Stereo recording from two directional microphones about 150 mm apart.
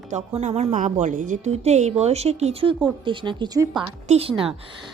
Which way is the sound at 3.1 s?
30° right (ahead or behind).